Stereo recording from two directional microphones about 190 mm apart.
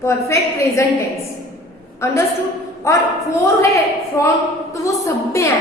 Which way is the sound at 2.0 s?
15° left (ahead or behind).